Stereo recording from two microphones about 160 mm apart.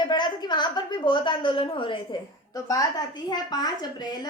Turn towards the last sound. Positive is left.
turn(degrees=25)  # may be behind; listen again after turning